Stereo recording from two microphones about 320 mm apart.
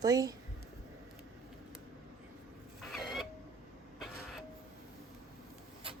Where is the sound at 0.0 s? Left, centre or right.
Centre.